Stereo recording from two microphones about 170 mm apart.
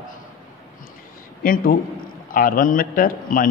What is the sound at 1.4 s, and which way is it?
A man's voice, 55° left (ahead or behind).